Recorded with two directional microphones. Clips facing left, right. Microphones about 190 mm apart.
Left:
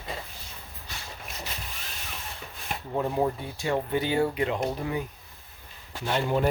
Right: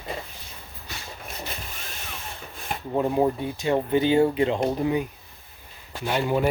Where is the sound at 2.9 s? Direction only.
20° right (ahead or behind).